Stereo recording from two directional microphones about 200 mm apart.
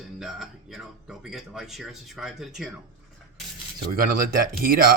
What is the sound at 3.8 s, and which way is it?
Speech, 45° right (ahead or behind).